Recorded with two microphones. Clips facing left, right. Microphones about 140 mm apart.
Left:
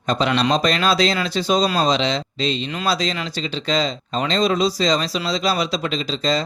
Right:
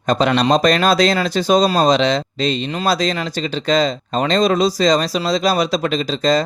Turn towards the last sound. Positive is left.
turn(degrees=-50)  # may be behind; listen again after turning